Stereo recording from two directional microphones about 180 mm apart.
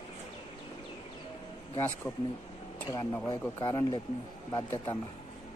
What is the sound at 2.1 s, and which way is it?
Speech, 5° left (ahead or behind).